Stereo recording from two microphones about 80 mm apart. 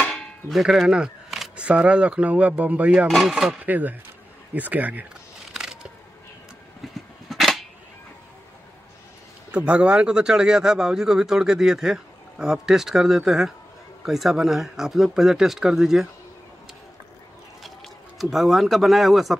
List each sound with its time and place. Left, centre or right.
0.0 s clang: centre
3.1 s speech: centre
3.6 s speech: right
5.5 s a sound: centre
9.5 s a man's voice: centre
17.6 s speech: centre